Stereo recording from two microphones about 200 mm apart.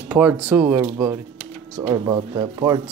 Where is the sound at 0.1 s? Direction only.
10° right (ahead or behind).